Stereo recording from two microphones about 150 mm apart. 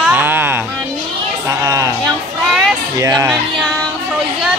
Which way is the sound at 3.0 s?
25° right (ahead or behind).